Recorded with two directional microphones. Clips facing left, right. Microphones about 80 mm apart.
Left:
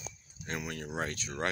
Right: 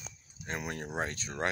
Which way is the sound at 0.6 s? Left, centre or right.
Right.